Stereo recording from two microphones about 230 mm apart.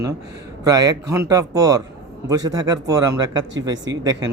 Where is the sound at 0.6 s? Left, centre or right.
Centre.